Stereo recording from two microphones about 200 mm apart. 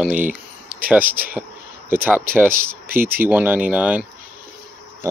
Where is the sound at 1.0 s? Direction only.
45° right (ahead or behind).